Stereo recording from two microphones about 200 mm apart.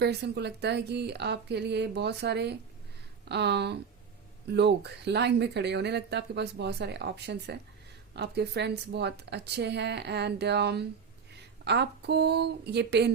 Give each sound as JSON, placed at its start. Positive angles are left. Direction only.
{"t": 0.0, "sound": "speech", "side_deg": -55}